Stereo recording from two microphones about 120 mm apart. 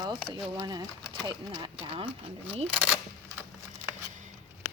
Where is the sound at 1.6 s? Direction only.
45° right (ahead or behind).